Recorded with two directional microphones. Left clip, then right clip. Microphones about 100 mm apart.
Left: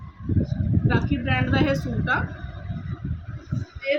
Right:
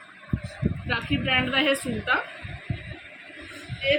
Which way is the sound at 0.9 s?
30° left (ahead or behind).